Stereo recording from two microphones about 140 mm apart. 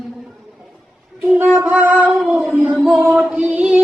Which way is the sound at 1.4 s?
15° right (ahead or behind).